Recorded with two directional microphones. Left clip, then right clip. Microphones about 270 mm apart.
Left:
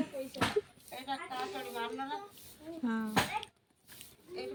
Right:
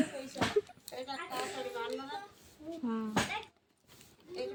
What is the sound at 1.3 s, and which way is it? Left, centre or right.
Speech, right.